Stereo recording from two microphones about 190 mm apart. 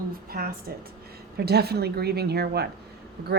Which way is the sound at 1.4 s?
55° right (ahead or behind).